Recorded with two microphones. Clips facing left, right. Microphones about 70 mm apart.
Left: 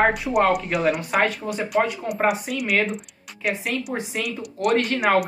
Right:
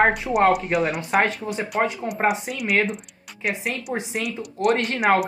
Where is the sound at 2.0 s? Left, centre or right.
Right.